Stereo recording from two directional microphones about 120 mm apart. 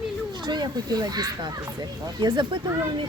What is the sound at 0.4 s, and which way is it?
Speech, 35° right (ahead or behind).